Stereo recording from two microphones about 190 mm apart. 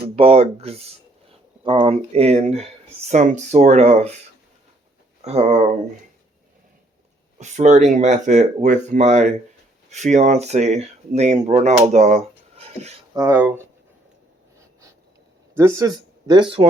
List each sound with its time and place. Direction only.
0.2 s speech: 30° right (ahead or behind)
5.2 s speech: 35° right (ahead or behind)
7.3 s speech: 40° right (ahead or behind)
11.9 s a sound: 40° right (ahead or behind)
13.1 s speech: 15° right (ahead or behind)
15.5 s speech: 15° right (ahead or behind)